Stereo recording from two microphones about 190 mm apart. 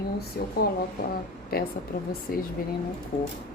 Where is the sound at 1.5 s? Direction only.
50° left (ahead or behind).